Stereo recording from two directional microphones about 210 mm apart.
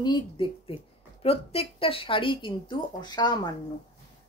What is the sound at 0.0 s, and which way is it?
A woman's voice, 20° left (ahead or behind).